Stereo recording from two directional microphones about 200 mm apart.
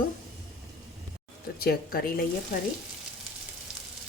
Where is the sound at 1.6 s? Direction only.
50° left (ahead or behind).